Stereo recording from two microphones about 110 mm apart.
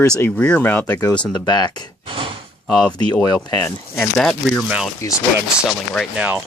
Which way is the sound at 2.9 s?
35° left (ahead or behind).